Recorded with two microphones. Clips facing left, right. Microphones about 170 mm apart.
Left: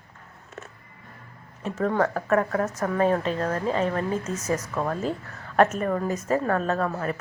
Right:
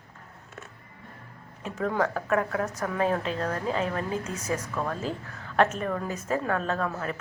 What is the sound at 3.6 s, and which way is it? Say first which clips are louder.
Speech: left 4 dB; 35° left (ahead or behind).